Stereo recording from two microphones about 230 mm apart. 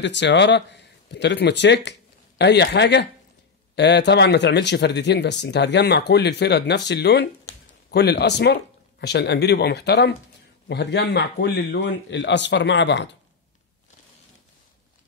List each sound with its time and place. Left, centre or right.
0.0 s speech: left